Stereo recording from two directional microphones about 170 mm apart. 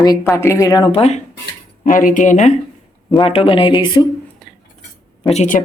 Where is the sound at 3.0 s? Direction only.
35° left (ahead or behind).